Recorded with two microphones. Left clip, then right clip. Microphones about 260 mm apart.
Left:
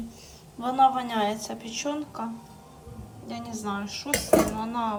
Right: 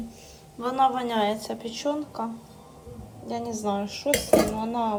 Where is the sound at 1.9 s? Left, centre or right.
Left.